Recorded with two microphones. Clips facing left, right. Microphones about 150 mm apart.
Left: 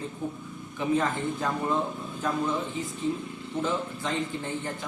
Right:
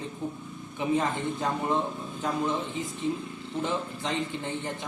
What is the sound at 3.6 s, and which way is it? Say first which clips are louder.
Speech: left 1 dB; 20° right (ahead or behind).